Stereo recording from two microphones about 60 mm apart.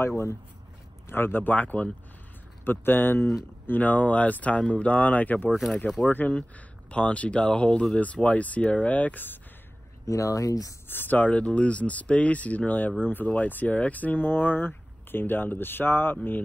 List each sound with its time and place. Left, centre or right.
1.0 s speech: left
2.6 s speech: left
5.9 s speech: centre
6.3 s speech: centre
10.0 s speech: left
10.9 s speech: left